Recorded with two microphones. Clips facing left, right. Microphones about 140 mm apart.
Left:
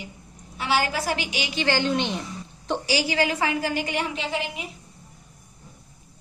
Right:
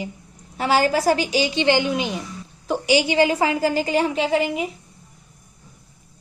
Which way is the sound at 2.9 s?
20° right (ahead or behind).